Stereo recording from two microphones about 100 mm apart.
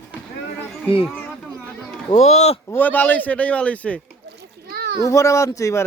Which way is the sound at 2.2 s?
90° left.